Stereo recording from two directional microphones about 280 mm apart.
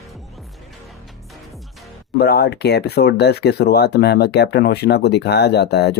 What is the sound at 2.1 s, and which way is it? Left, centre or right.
Speech, left.